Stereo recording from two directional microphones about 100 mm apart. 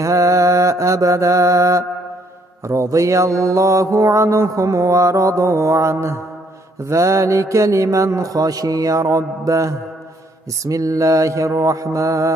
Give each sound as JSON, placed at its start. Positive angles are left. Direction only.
{"t": 0.0, "sound": "mantra", "side_deg": -30}